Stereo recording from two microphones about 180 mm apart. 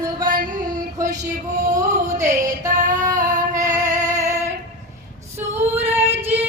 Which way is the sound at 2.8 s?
45° right (ahead or behind).